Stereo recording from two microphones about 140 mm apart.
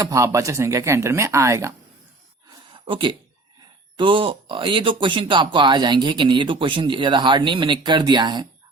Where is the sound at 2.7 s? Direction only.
35° right (ahead or behind).